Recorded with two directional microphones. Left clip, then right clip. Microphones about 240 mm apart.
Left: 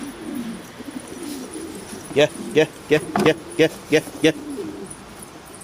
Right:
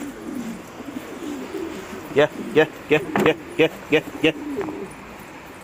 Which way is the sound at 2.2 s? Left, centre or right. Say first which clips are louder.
Even; centre.